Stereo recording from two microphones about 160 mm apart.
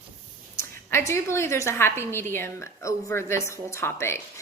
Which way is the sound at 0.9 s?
15° left (ahead or behind).